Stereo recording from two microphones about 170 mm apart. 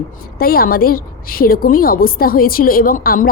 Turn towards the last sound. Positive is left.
turn(degrees=55)  # may be behind; listen again after turning